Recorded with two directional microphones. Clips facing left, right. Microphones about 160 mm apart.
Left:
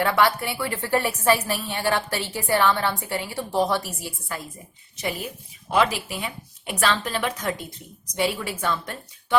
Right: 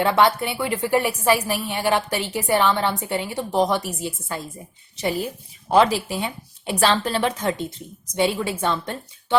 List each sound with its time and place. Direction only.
0.0 s a woman's voice: 20° right (ahead or behind)
4.9 s speech: 30° right (ahead or behind)